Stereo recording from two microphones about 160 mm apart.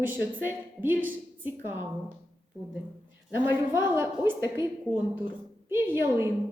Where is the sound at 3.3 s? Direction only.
10° right (ahead or behind).